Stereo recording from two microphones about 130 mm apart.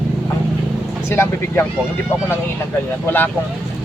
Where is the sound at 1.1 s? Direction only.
20° left (ahead or behind).